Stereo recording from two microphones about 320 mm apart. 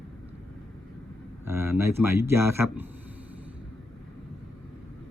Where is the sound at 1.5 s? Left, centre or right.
Centre.